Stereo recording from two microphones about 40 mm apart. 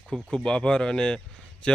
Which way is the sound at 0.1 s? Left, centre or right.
Right.